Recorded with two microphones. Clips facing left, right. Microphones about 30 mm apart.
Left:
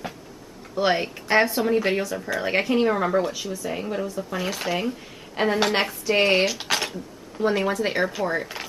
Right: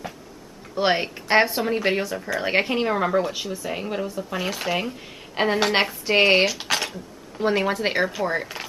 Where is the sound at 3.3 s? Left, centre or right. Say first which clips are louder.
Even; right.